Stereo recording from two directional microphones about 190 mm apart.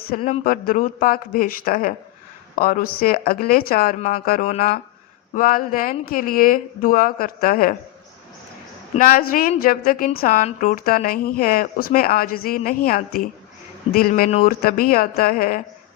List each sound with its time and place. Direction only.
0.1 s speech: 45° left (ahead or behind)
9.0 s speech: 50° left (ahead or behind)